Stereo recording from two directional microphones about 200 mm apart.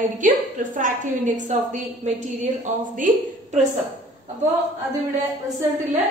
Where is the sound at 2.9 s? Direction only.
40° right (ahead or behind).